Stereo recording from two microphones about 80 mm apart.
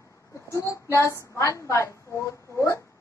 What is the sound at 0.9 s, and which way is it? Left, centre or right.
A woman's voice, left.